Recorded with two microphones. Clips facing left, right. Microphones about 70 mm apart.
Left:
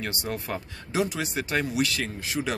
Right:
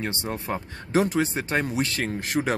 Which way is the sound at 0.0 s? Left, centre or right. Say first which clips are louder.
Right 2 dB; right.